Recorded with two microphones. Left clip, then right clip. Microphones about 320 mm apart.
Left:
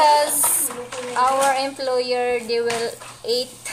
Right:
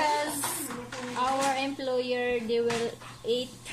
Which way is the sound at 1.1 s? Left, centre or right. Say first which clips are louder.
Left 10 dB; left.